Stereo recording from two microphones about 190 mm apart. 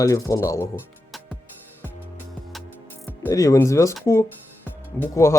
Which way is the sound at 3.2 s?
15° left (ahead or behind).